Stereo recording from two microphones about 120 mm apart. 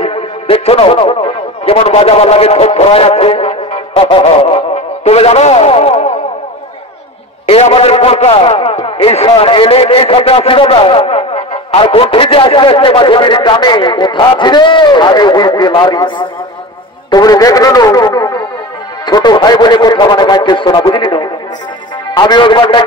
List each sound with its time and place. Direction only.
0.0 s speech: 50° left (ahead or behind)
7.4 s a man's voice: 55° left (ahead or behind)